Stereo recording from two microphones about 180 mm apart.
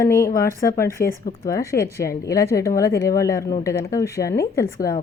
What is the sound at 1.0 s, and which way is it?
Speech, 55° left (ahead or behind).